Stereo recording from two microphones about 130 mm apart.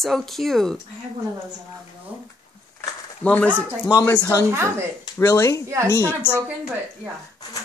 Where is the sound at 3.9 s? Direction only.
15° left (ahead or behind).